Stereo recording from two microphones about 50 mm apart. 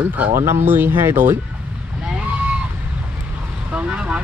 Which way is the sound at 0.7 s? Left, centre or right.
Right.